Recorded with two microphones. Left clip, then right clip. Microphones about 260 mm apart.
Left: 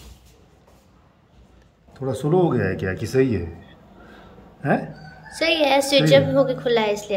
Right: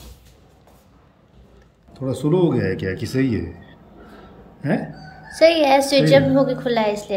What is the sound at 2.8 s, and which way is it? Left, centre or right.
Speech, left.